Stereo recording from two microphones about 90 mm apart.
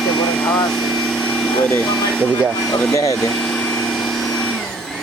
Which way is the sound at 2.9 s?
40° left (ahead or behind).